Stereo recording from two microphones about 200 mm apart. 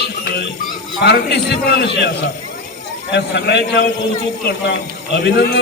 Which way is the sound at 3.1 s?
55° left (ahead or behind).